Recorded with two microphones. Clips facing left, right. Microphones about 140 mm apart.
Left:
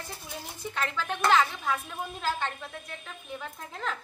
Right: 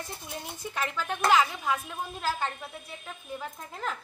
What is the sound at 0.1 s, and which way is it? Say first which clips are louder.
Speech: right 2 dB; centre (ahead or behind).